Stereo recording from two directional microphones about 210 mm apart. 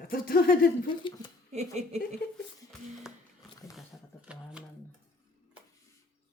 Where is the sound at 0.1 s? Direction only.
45° left (ahead or behind).